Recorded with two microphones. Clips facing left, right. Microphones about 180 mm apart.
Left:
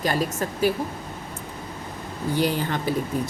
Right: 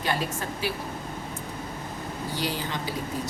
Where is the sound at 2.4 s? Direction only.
55° left (ahead or behind).